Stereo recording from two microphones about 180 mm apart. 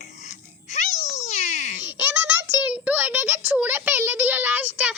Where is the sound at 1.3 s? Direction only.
40° left (ahead or behind).